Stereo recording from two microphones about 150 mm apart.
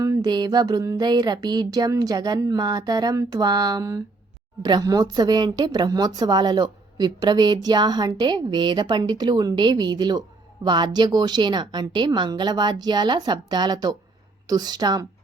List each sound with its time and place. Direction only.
0.0 s speech: 25° right (ahead or behind)